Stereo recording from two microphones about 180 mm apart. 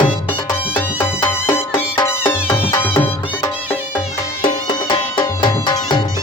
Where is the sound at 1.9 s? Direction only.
15° left (ahead or behind).